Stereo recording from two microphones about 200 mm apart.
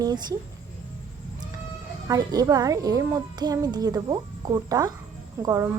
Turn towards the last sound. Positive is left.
turn(degrees=-15)  # may be behind; listen again after turning